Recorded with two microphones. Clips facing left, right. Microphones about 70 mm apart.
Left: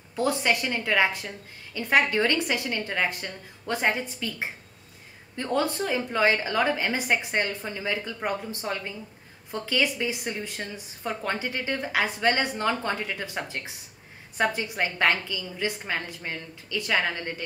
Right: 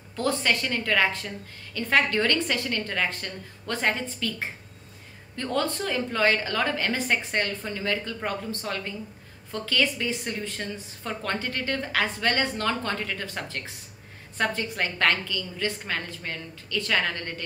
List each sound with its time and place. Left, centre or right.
0.1 s a woman's voice: centre